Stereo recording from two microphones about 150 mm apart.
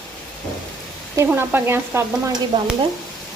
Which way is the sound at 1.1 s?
15° right (ahead or behind).